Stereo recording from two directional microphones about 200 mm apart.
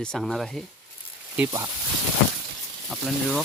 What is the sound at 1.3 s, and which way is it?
Speech, 10° right (ahead or behind).